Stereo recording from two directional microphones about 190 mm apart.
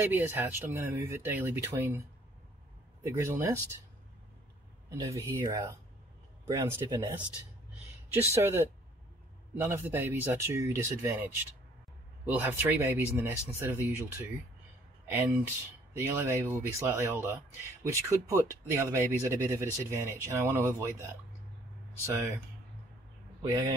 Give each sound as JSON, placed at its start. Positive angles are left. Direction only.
{"t": 0.0, "sound": "speech", "side_deg": -10}
{"t": 4.8, "sound": "speech", "side_deg": -15}
{"t": 8.3, "sound": "speech", "side_deg": -15}
{"t": 22.0, "sound": "speech", "side_deg": -15}
{"t": 23.4, "sound": "speech", "side_deg": -20}